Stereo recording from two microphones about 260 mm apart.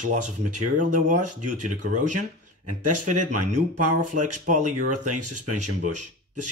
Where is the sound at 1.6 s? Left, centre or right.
Right.